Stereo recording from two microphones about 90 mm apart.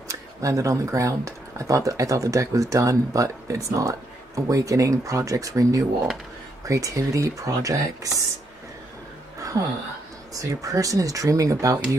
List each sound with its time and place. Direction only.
0.1 s speech: 40° right (ahead or behind)
9.4 s a sound: 40° right (ahead or behind)
10.3 s speech: 40° right (ahead or behind)